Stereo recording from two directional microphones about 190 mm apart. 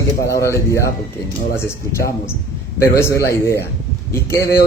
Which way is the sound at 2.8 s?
15° left (ahead or behind).